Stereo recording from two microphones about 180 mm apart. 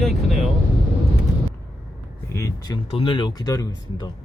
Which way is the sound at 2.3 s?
20° left (ahead or behind).